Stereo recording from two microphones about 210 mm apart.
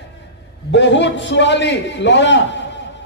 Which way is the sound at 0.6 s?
60° left (ahead or behind).